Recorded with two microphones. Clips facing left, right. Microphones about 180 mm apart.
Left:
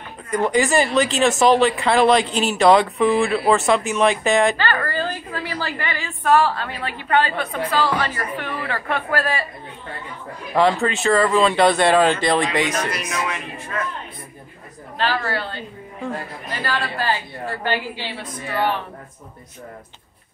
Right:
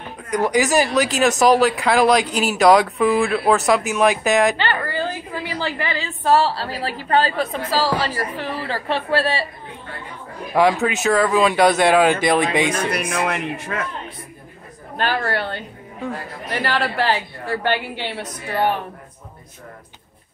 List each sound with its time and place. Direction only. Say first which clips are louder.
0.4 s speech: right 1 dB; 5° right (ahead or behind)
4.6 s a woman's voice: even; 20° right (ahead or behind)
10.5 s speech: right 1 dB; 10° right (ahead or behind)
12.9 s a man's voice: right 4 dB; 55° right (ahead or behind); by 13.8 s 70° right (ahead or behind)
15.0 s a man's voice: right 1 dB; 55° right (ahead or behind)
16.4 s a man's voice: right 5 dB; 75° right (ahead or behind)
17.6 s a man's voice: right 1 dB; 65° right (ahead or behind)